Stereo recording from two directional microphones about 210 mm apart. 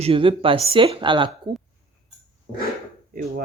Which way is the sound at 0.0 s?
25° right (ahead or behind).